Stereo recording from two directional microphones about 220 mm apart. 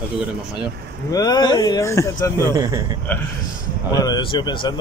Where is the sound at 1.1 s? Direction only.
15° left (ahead or behind).